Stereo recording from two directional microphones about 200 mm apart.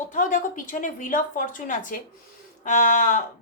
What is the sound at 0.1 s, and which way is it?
Speech, 40° left (ahead or behind).